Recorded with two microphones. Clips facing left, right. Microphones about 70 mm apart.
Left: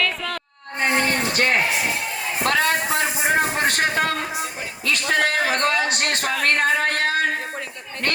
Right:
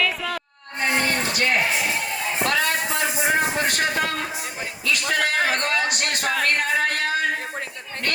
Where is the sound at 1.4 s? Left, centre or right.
Left.